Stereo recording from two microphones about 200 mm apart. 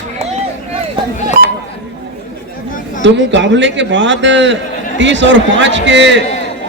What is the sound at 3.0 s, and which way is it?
A man's voice, 65° right (ahead or behind).